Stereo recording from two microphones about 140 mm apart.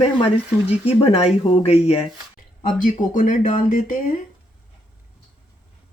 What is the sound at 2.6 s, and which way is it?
Speech, 70° left (ahead or behind).